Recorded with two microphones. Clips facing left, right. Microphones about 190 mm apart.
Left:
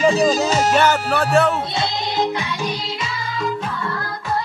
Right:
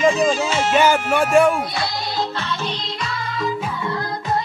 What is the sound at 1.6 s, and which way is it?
Music, 25° left (ahead or behind).